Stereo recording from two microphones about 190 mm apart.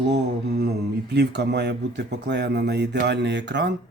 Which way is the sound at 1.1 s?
60° right (ahead or behind).